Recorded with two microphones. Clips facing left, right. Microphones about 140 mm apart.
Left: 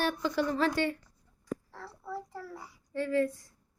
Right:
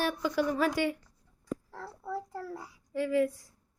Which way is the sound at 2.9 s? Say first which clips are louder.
Right 1 dB; 5° right (ahead or behind).